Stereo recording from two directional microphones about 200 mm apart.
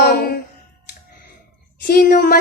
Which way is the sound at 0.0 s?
50° left (ahead or behind).